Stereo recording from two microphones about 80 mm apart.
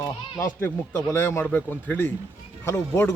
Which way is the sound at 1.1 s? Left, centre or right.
Left.